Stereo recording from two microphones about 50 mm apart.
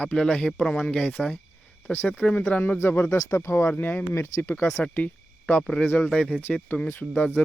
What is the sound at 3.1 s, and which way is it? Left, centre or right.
Speech, left.